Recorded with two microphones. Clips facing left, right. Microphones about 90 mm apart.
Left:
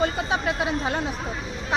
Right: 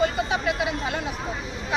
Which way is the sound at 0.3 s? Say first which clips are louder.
Even; 30° left (ahead or behind).